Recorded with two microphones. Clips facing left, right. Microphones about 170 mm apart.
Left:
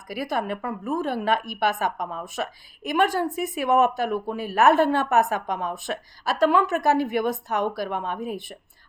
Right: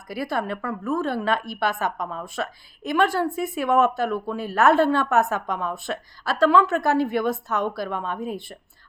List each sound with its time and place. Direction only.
0.1 s speech: 15° left (ahead or behind)